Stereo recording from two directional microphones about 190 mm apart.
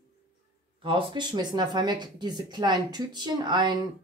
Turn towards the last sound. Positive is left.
turn(degrees=-25)  # may be behind; listen again after turning